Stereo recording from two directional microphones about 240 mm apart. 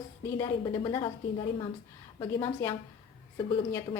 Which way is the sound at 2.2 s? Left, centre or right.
Centre.